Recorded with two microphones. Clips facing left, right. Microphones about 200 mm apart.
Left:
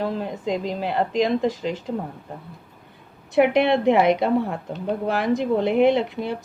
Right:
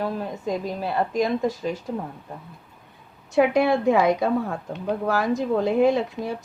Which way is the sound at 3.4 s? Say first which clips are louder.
Left 2 dB; 20° left (ahead or behind).